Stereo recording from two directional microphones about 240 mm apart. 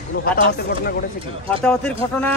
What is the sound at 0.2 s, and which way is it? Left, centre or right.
Speech, left.